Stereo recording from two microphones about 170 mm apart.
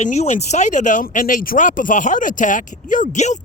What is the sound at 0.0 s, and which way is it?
Speech, 40° left (ahead or behind).